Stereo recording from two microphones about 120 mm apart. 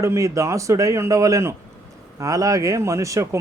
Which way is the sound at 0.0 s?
25° right (ahead or behind).